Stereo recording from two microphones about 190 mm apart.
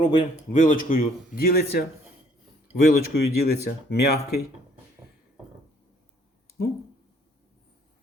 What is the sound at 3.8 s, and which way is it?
Speech, 60° left (ahead or behind).